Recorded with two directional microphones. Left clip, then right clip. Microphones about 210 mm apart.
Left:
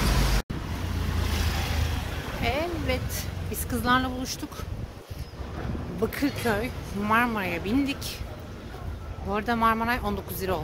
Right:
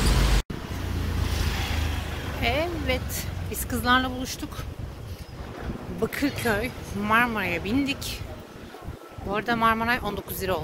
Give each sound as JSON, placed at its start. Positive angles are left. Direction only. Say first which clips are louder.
{"t": 1.3, "sound": "vehicle", "louder": "right 1 dB", "side_deg": 55}
{"t": 2.4, "sound": "speech", "louder": "right 2 dB", "side_deg": 5}
{"t": 5.9, "sound": "speech", "louder": "right 1 dB", "side_deg": 5}
{"t": 9.3, "sound": "speech", "louder": "right 1 dB", "side_deg": 10}